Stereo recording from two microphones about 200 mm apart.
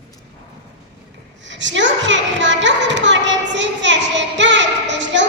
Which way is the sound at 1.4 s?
65° right (ahead or behind).